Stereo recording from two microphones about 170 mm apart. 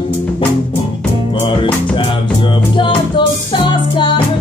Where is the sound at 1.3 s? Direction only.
30° left (ahead or behind).